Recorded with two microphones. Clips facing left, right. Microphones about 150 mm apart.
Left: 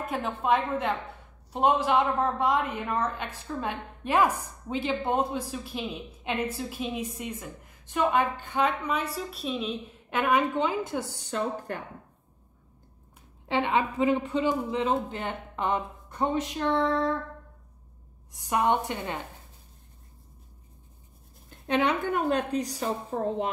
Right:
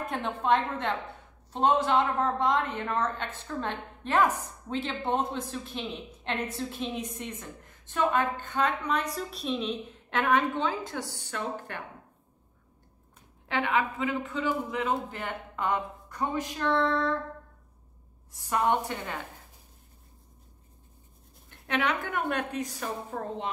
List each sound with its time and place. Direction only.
0.0 s a woman's voice: centre (ahead or behind); by 11.1 s 20° left (ahead or behind)
11.2 s a woman's voice: 35° left (ahead or behind)
13.5 s speech: 25° left (ahead or behind)
18.3 s speech: 15° left (ahead or behind)
21.6 s a woman's voice: 30° left (ahead or behind)